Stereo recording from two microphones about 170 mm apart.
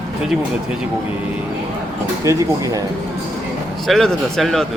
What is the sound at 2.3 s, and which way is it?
Speech, 20° right (ahead or behind).